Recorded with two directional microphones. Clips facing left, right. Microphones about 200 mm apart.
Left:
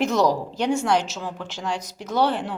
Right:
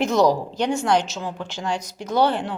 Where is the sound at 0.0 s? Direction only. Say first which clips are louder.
Right 2 dB; 5° left (ahead or behind).